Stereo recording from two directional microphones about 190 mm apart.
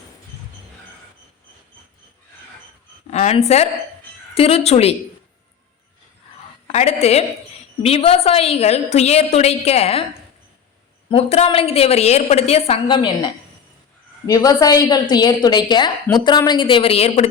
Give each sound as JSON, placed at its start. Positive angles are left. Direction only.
{"t": 3.1, "sound": "a woman's voice", "side_deg": 35}
{"t": 6.7, "sound": "a woman's voice", "side_deg": 35}
{"t": 11.1, "sound": "a woman's voice", "side_deg": 35}
{"t": 14.3, "sound": "a woman's voice", "side_deg": 20}